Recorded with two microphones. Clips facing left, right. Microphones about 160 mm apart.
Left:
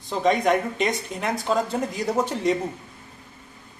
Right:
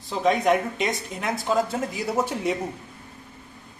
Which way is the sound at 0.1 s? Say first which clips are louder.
Even; centre (ahead or behind).